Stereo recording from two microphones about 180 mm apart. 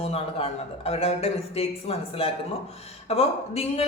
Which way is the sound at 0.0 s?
35° left (ahead or behind).